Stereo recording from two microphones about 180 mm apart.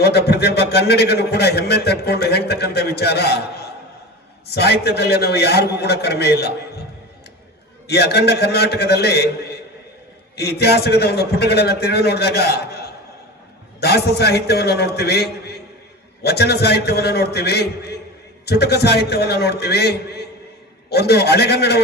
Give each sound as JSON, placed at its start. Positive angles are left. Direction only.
{"t": 0.0, "sound": "a man's voice", "side_deg": 65}
{"t": 4.4, "sound": "a man's voice", "side_deg": 65}
{"t": 7.9, "sound": "a man's voice", "side_deg": 65}